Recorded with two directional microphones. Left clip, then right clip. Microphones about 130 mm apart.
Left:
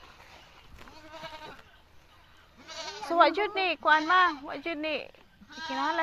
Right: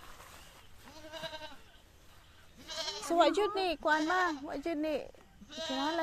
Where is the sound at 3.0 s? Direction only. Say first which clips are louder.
Left 5 dB; 65° right (ahead or behind); by 6.0 s 45° right (ahead or behind).